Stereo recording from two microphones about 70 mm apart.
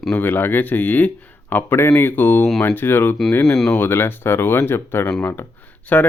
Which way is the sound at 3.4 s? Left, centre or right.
Centre.